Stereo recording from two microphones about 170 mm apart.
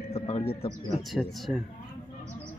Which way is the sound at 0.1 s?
35° left (ahead or behind).